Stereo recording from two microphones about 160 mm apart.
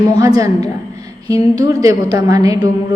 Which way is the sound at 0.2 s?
20° right (ahead or behind).